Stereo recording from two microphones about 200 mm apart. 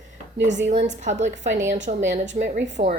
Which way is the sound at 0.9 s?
40° right (ahead or behind).